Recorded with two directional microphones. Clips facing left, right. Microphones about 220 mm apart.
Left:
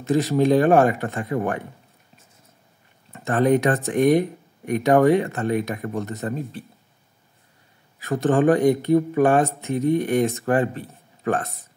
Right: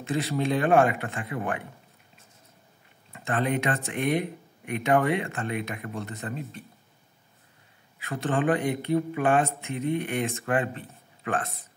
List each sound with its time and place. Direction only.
0.0 s speech: 40° left (ahead or behind)
3.1 s speech: 40° left (ahead or behind)
8.0 s speech: 45° left (ahead or behind)